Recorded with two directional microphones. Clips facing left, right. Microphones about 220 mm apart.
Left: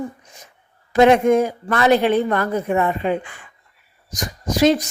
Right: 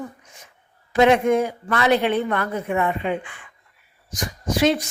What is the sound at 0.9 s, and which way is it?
A woman's voice, 45° left (ahead or behind).